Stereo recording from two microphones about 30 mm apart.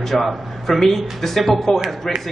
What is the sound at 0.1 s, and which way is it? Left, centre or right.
A man's voice, centre.